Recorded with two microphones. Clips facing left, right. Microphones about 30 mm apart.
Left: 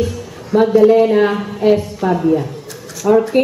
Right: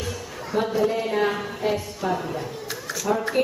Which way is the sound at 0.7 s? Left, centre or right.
Left.